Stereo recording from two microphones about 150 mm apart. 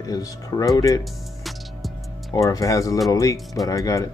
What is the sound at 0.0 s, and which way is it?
Speech, 25° left (ahead or behind).